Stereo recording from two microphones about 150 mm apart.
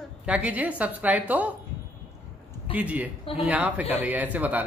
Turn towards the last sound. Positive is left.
turn(degrees=-10)  # may be behind; listen again after turning